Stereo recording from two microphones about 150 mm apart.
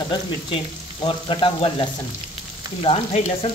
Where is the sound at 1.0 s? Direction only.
35° left (ahead or behind).